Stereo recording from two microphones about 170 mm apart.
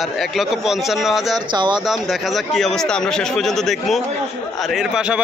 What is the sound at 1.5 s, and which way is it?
Speech, 25° right (ahead or behind).